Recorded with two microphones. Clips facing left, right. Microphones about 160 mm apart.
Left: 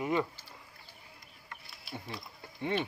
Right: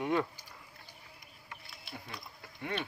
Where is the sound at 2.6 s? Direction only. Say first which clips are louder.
Left 5 dB; 25° left (ahead or behind).